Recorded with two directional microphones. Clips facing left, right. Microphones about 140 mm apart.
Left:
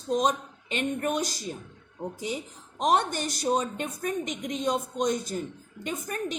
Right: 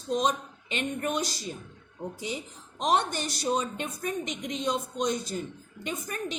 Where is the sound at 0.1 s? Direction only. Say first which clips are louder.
Left 2 dB; 45° left (ahead or behind).